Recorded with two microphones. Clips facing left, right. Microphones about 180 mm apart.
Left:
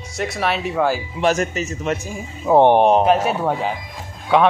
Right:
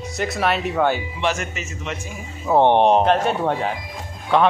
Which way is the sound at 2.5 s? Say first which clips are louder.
Left 2 dB; 10° left (ahead or behind).